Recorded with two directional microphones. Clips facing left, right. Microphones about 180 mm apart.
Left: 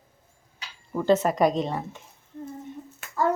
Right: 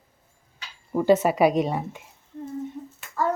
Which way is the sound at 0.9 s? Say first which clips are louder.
Right 2 dB; 10° right (ahead or behind).